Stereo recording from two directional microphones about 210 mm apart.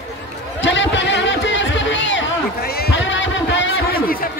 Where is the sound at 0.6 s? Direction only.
60° left (ahead or behind).